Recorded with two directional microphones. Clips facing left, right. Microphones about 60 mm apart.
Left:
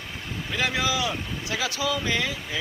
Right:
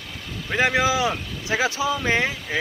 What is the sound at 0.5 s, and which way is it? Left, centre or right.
Speech, right.